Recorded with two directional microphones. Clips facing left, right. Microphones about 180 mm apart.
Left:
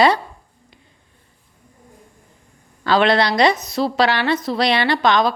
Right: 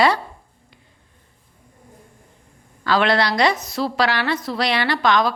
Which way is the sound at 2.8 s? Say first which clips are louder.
Left 3 dB; 25° left (ahead or behind).